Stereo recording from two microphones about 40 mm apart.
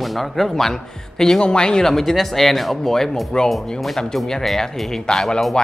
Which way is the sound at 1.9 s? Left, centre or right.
Centre.